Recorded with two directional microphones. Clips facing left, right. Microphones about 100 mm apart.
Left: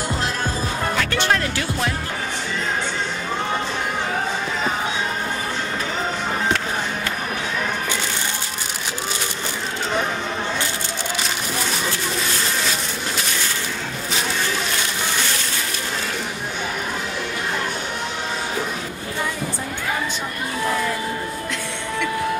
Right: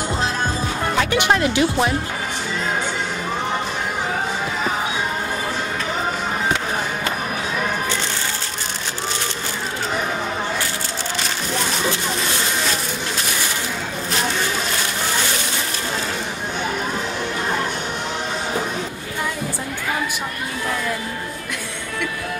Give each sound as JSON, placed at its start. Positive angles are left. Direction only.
{"t": 1.1, "sound": "speech", "side_deg": -15}